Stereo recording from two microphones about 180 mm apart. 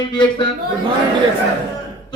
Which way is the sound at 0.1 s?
25° left (ahead or behind).